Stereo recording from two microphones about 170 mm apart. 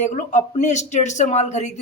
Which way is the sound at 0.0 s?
45° left (ahead or behind).